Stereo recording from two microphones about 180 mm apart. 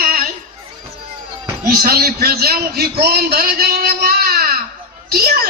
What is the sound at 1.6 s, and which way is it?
A man's voice, 55° right (ahead or behind).